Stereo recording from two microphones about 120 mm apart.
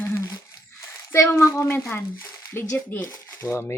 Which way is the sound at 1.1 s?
20° left (ahead or behind).